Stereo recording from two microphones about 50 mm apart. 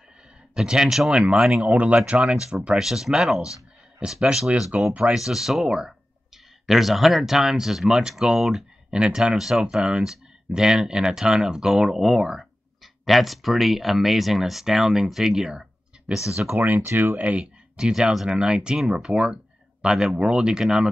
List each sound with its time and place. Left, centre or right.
0.6 s speech: centre
1.1 s speech: right
2.8 s speech: centre
4.7 s speech: right
5.1 s speech: centre
9.4 s speech: centre
16.5 s speech: right
17.2 s speech: right
17.7 s speech: centre